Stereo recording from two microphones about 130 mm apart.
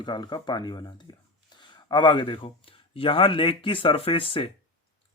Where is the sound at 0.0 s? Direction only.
35° left (ahead or behind).